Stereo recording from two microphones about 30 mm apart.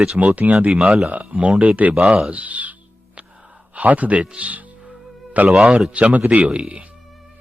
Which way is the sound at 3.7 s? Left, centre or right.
Right.